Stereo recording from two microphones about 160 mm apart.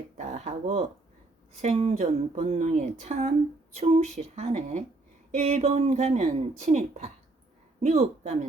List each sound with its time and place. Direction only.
0.2 s speech: 45° right (ahead or behind)